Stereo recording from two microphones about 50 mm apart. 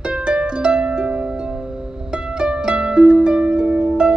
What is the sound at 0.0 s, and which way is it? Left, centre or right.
Harp, centre.